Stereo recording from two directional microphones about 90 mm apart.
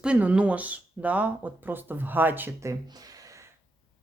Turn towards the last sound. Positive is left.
turn(degrees=-40)  # may be behind; listen again after turning